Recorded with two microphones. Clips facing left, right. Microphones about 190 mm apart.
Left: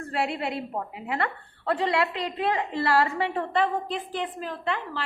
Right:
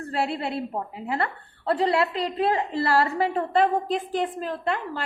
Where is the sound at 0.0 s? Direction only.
35° right (ahead or behind).